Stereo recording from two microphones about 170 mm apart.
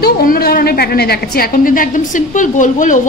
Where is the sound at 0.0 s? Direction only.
65° left (ahead or behind).